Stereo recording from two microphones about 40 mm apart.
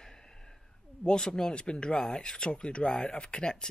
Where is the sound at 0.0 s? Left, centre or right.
Centre.